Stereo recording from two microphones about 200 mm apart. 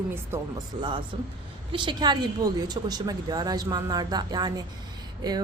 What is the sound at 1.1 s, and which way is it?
A woman's voice, 25° right (ahead or behind).